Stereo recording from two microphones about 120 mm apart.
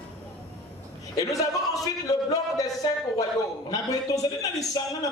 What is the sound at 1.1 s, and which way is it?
Speech, 30° left (ahead or behind).